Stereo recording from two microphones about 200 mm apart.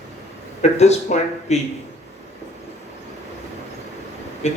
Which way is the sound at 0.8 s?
35° left (ahead or behind).